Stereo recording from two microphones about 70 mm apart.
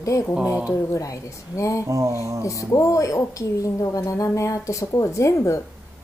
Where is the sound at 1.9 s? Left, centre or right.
Right.